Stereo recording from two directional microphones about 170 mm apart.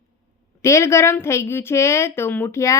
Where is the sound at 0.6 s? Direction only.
15° left (ahead or behind).